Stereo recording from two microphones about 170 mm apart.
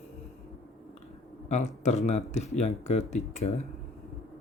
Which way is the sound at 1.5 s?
45° left (ahead or behind).